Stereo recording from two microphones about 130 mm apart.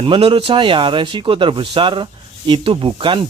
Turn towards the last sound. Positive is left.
turn(degrees=-40)  # may be behind; listen again after turning